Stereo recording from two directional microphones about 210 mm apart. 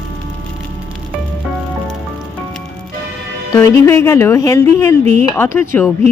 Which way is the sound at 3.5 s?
15° left (ahead or behind).